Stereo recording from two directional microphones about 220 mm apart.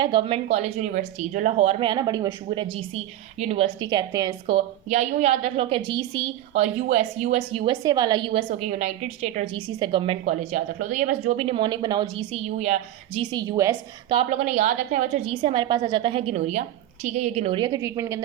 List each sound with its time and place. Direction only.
0.0 s a woman's voice: 20° right (ahead or behind)
0.5 s a woman's voice: 35° right (ahead or behind)
1.8 s a woman's voice: 20° right (ahead or behind)
12.5 s a woman's voice: 30° right (ahead or behind)
13.3 s a woman's voice: 20° right (ahead or behind)
14.2 s a woman's voice: 30° right (ahead or behind); by 18.2 s 15° right (ahead or behind)